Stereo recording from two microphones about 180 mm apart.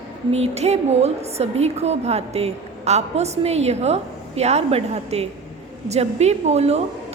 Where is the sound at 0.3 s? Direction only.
35° right (ahead or behind).